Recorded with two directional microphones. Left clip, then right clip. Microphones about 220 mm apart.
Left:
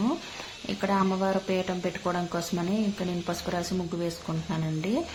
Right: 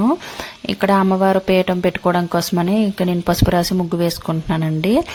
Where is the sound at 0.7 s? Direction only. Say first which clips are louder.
Right 11 dB; 45° right (ahead or behind).